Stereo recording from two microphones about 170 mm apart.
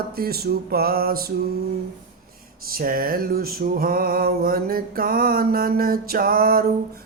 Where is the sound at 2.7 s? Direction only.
60° right (ahead or behind).